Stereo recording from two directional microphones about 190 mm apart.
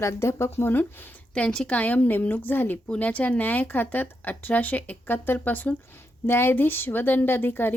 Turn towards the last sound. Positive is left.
turn(degrees=10)  # may be behind; listen again after turning